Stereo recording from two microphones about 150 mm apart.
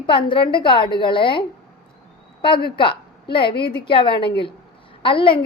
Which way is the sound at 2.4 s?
35° left (ahead or behind).